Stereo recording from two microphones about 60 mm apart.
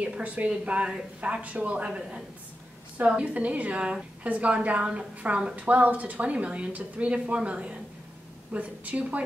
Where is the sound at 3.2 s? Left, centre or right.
Right.